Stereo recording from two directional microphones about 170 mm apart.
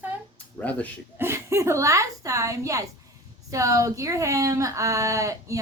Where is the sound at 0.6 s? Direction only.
10° left (ahead or behind).